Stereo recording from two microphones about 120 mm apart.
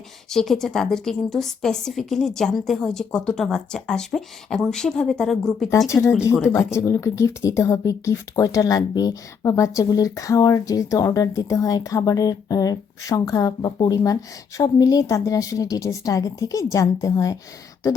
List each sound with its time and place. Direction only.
0.3 s a woman's voice: 5° left (ahead or behind)
5.9 s speech: 25° left (ahead or behind)